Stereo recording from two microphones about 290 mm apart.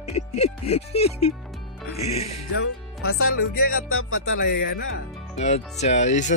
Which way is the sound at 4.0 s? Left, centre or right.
Left.